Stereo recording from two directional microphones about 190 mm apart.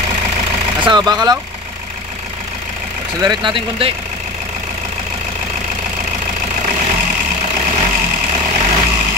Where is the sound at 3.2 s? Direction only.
25° right (ahead or behind).